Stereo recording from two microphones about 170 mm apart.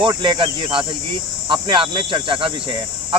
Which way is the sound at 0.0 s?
25° right (ahead or behind).